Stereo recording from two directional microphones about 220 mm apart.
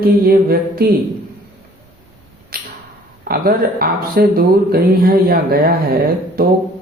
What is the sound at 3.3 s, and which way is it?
Speech, 45° right (ahead or behind).